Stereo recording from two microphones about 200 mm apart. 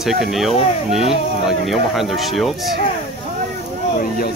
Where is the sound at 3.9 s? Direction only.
45° left (ahead or behind).